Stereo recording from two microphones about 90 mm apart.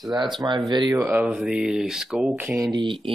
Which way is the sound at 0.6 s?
45° right (ahead or behind).